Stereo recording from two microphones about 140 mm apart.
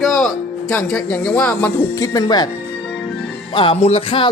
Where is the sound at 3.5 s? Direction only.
40° left (ahead or behind).